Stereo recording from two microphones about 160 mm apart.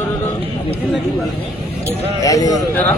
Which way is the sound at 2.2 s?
20° left (ahead or behind).